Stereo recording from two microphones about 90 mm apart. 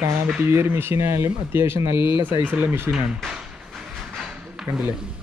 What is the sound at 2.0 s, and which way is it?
Speech, 60° left (ahead or behind).